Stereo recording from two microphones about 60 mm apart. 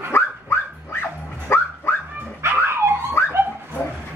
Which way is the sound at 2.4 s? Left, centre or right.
Right.